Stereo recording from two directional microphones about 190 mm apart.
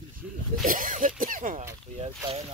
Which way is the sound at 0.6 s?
45° right (ahead or behind).